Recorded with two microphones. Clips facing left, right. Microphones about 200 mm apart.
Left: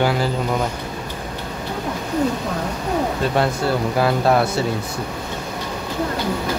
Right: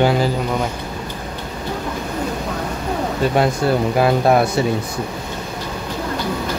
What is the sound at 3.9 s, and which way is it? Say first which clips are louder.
Speech: right 2 dB; 15° right (ahead or behind).